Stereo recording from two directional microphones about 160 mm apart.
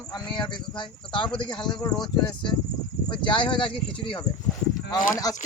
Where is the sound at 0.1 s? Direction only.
30° left (ahead or behind).